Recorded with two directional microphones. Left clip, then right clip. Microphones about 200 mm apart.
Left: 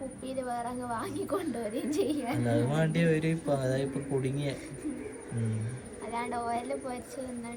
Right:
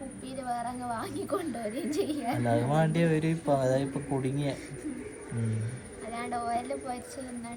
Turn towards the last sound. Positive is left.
turn(degrees=20)  # may be behind; listen again after turning